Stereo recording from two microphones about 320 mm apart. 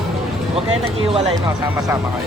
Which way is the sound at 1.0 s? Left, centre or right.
Centre.